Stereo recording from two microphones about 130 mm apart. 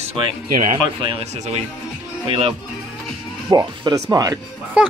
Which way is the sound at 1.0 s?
40° right (ahead or behind).